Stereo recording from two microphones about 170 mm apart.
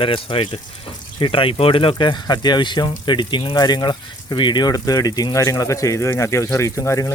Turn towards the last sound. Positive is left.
turn(degrees=20)  # may be behind; listen again after turning